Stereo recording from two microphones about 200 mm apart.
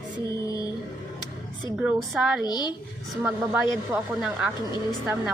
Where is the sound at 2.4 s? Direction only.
20° left (ahead or behind).